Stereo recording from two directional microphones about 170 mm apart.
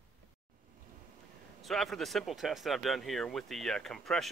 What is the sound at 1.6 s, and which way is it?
Speech, centre (ahead or behind).